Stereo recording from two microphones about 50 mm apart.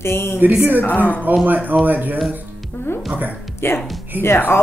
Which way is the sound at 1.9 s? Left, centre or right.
Right.